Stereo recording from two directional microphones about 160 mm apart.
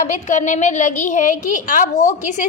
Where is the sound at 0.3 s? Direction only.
50° left (ahead or behind).